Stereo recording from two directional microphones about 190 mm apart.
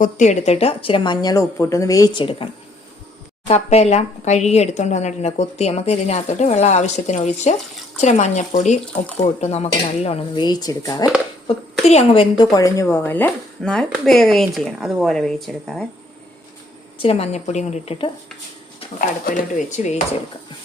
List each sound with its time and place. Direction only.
0.0 s a woman's voice: 40° left (ahead or behind); by 11.0 s 20° left (ahead or behind)
11.4 s a woman's voice: 30° left (ahead or behind)
12.5 s speech: 15° left (ahead or behind); by 15.9 s centre (ahead or behind)
17.0 s speech: 30° left (ahead or behind)
18.9 s speech: 45° left (ahead or behind)